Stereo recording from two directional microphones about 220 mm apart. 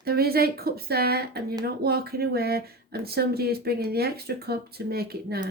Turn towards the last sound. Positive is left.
turn(degrees=-45)  # may be behind; listen again after turning